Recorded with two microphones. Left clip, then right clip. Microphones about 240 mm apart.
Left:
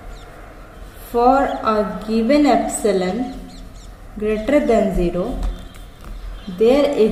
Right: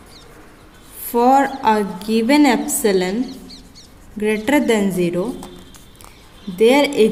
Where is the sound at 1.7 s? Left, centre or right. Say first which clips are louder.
Right 1 dB; right.